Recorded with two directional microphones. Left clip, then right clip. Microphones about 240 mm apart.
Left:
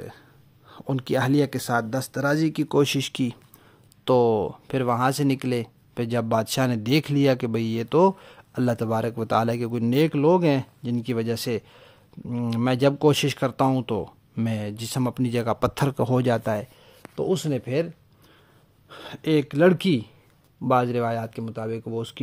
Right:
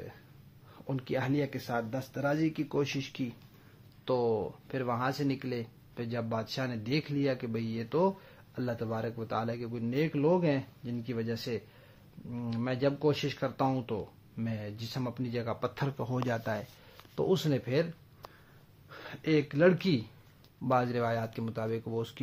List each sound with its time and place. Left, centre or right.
0.7 s speech: left
18.9 s speech: left